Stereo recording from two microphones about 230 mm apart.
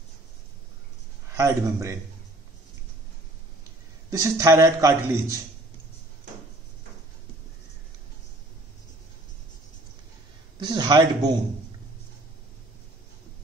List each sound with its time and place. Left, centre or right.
1.3 s a man's voice: centre
4.1 s a man's voice: centre
10.6 s a man's voice: centre